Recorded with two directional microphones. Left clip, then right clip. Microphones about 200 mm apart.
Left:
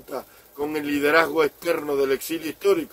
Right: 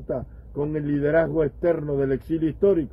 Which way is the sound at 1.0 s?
20° left (ahead or behind).